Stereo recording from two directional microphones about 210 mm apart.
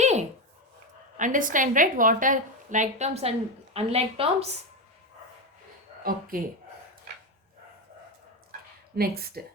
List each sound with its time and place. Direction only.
0.0 s a sound: 35° right (ahead or behind)
1.1 s a woman's voice: 35° right (ahead or behind)
6.0 s speech: 45° right (ahead or behind)
9.0 s speech: 45° right (ahead or behind)